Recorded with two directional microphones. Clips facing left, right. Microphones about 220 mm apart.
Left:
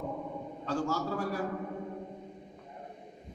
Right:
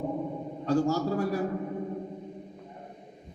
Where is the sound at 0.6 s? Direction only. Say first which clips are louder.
Right 7 dB; 40° right (ahead or behind).